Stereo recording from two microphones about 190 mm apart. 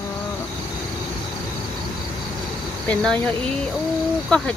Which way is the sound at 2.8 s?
5° left (ahead or behind).